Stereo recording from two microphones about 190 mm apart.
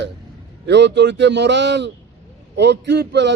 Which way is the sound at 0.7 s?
65° right (ahead or behind).